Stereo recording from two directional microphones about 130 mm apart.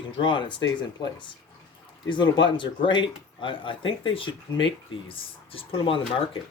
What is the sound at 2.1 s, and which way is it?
Speech, 35° left (ahead or behind).